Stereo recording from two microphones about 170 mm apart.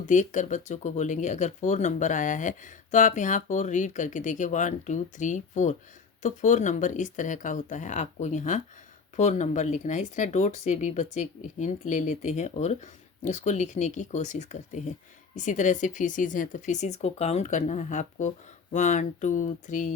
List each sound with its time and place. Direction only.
0.0 s speech: 45° left (ahead or behind)